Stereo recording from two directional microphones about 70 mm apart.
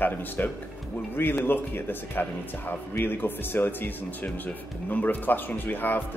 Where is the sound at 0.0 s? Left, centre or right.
Left.